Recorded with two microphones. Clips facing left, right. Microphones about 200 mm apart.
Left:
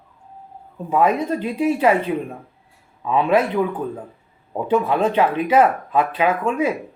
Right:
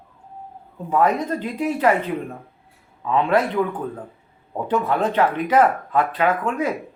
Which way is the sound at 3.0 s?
10° left (ahead or behind).